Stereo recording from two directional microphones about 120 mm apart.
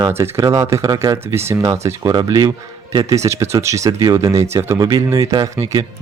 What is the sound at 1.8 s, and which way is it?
Speech, 35° right (ahead or behind).